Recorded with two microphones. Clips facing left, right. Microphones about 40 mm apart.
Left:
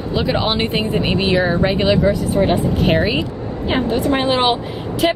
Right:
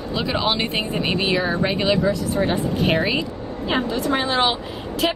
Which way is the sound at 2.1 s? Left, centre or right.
Left.